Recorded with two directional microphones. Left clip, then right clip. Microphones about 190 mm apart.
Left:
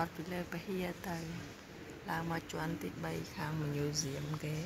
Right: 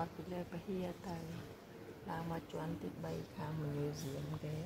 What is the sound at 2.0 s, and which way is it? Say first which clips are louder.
Speech: left 6 dB; 20° left (ahead or behind).